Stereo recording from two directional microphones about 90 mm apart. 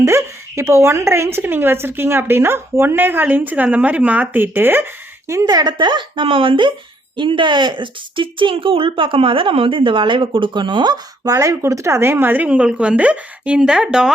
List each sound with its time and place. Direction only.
0.0 s speech: 30° right (ahead or behind)
5.3 s a woman's voice: 40° right (ahead or behind)
5.7 s speech: 60° right (ahead or behind); by 14.1 s 5° right (ahead or behind)